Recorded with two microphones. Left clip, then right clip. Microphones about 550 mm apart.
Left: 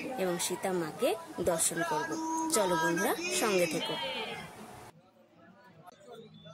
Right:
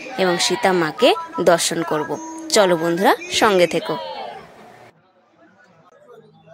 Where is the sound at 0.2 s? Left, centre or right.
Centre.